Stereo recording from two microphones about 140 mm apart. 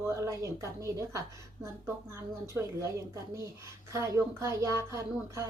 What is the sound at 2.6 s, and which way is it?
Speech, 15° right (ahead or behind).